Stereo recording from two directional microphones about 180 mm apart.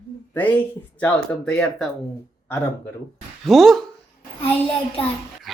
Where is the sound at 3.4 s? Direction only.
Centre (ahead or behind).